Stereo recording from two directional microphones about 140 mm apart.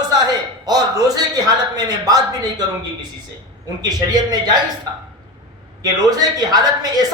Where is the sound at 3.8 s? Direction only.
30° right (ahead or behind).